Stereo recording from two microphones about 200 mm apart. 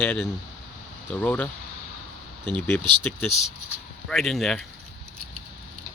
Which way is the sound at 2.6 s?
10° left (ahead or behind).